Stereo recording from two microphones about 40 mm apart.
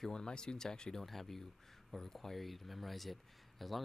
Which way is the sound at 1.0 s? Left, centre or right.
Centre.